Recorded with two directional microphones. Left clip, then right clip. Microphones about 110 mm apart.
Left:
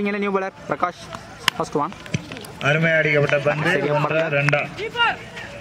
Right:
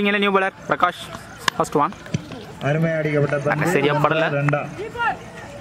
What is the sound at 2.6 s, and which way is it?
Speech, 35° left (ahead or behind).